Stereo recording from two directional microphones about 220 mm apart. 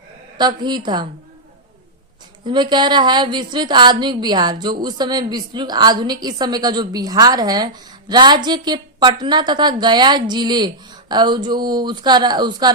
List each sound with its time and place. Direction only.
0.3 s a woman's voice: 20° right (ahead or behind)
2.5 s a woman's voice: 20° right (ahead or behind)